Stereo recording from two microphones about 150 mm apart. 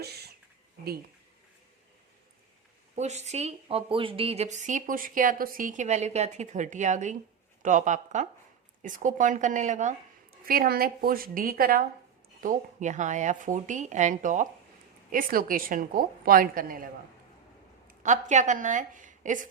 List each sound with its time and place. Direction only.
0.0 s a sound: 90° right
2.9 s a woman's voice: 50° right (ahead or behind)
10.4 s a woman's voice: 80° right
12.4 s speech: 60° right (ahead or behind)
15.1 s a woman's voice: 70° right (ahead or behind)
17.8 s speech: 55° right (ahead or behind)